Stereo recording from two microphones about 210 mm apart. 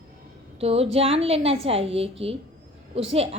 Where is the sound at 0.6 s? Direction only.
30° right (ahead or behind).